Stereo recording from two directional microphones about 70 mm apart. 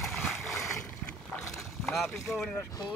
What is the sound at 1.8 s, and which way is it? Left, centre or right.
Speech, centre.